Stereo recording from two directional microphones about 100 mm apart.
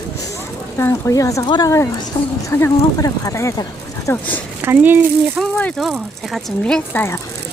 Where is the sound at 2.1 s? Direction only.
45° left (ahead or behind).